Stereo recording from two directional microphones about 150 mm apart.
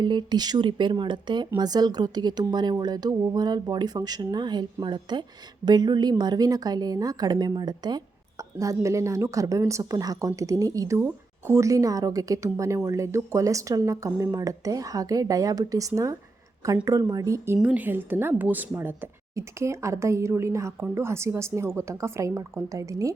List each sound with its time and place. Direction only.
0.0 s a woman's voice: 30° right (ahead or behind)